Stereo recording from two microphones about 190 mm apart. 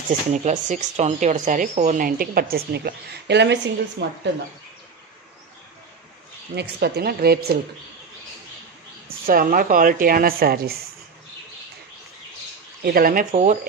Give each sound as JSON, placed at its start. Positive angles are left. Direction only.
{"t": 0.3, "sound": "speech", "side_deg": -40}
{"t": 6.5, "sound": "speech", "side_deg": -60}
{"t": 9.2, "sound": "speech", "side_deg": -50}
{"t": 12.8, "sound": "speech", "side_deg": -50}